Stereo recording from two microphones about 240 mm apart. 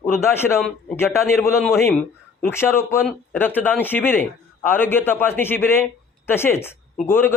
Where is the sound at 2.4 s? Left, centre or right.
Centre.